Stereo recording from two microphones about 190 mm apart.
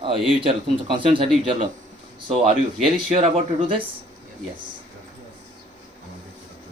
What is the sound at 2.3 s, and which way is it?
Speech, 30° right (ahead or behind).